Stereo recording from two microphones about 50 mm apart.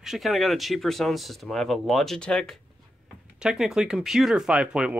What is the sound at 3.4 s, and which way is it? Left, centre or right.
Speech, centre.